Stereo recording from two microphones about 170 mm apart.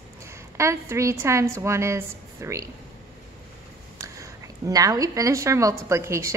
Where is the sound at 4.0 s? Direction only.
20° right (ahead or behind).